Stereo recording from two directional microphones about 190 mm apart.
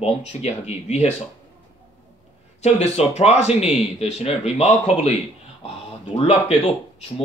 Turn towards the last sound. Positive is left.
turn(degrees=30)  # may be behind; listen again after turning